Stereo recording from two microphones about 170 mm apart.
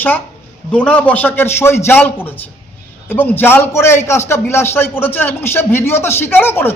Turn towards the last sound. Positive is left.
turn(degrees=15)  # may be behind; listen again after turning